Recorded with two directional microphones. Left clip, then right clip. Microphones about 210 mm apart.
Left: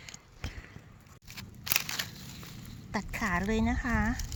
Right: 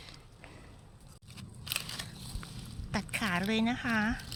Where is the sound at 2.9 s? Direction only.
5° right (ahead or behind).